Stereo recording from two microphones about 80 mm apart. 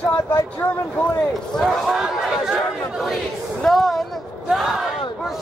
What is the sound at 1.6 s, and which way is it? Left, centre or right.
Chatter, centre.